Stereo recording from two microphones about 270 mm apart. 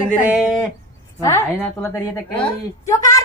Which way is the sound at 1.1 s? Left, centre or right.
Centre.